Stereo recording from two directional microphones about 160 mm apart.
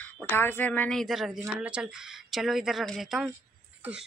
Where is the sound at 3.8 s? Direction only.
10° right (ahead or behind).